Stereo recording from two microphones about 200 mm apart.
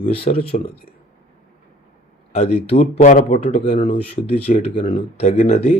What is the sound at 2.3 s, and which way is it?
Speech, 30° left (ahead or behind).